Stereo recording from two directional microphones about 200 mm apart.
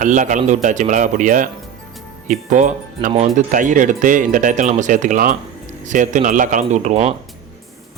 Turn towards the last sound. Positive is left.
turn(degrees=-35)  # may be behind; listen again after turning